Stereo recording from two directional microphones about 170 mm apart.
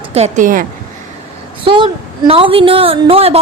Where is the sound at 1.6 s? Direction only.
30° right (ahead or behind).